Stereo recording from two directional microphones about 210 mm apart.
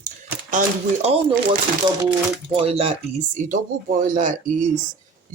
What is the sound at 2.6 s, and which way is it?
Speech, 25° right (ahead or behind).